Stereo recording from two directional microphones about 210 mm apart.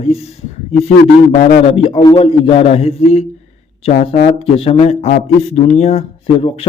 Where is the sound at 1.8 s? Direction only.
25° left (ahead or behind).